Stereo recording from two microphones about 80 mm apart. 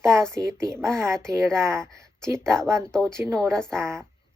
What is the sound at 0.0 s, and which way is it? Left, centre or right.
Speech, right.